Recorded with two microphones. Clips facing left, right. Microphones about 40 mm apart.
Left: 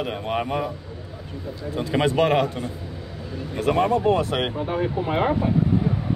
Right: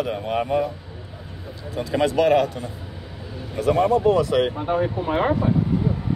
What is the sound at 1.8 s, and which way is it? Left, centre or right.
Speech, left.